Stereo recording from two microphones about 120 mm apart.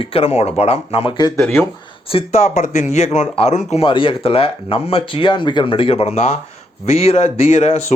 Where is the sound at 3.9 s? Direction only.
45° left (ahead or behind).